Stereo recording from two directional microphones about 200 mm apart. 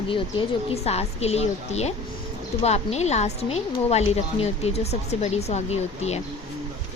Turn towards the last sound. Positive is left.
turn(degrees=35)  # may be behind; listen again after turning